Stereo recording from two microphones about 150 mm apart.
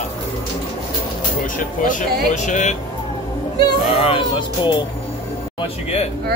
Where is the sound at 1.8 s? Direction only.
55° left (ahead or behind).